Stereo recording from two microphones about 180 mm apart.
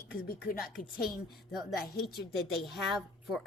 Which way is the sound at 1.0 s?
Centre (ahead or behind).